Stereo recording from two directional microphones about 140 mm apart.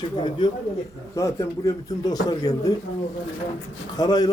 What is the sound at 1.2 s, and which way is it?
A man's voice, 20° left (ahead or behind).